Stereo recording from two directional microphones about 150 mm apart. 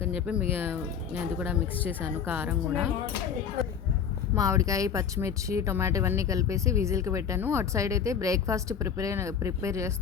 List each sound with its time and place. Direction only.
0.0 s speech: 5° right (ahead or behind)
4.4 s speech: 20° right (ahead or behind)